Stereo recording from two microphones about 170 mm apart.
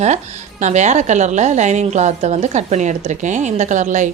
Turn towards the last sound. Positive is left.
turn(degrees=-45)  # may be behind; listen again after turning